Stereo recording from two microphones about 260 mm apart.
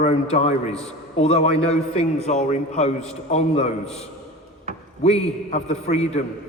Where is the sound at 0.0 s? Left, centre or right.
Left.